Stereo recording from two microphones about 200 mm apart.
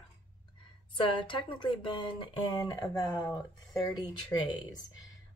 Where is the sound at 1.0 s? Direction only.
25° left (ahead or behind).